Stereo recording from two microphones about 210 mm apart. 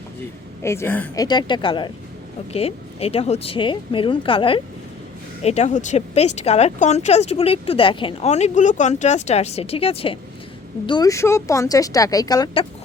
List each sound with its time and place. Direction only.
0.6 s speech: 10° left (ahead or behind)